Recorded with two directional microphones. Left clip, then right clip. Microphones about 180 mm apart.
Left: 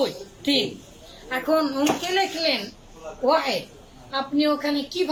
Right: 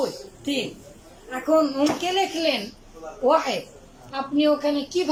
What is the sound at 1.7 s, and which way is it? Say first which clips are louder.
A woman's voice: even; 20° right (ahead or behind).